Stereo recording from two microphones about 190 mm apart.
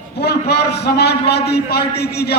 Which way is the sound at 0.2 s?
60° left (ahead or behind).